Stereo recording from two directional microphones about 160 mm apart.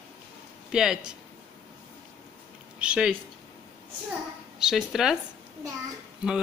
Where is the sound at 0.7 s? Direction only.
5° right (ahead or behind).